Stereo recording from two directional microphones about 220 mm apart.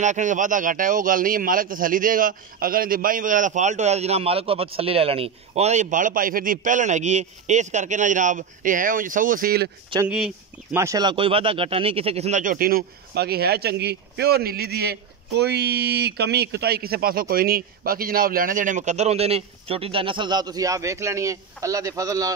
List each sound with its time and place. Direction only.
0.0 s speech: 35° right (ahead or behind)
10.0 s speech: 5° right (ahead or behind)